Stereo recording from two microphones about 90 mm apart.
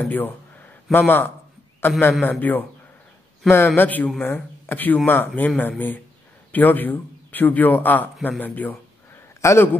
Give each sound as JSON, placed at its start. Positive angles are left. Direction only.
{"t": 0.1, "sound": "a sound", "side_deg": 20}
{"t": 0.9, "sound": "a man's voice", "side_deg": 20}
{"t": 9.4, "sound": "speech", "side_deg": 30}